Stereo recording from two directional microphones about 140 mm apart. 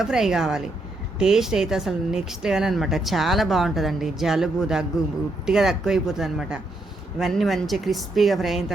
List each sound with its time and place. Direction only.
0.0 s speech: 5° right (ahead or behind)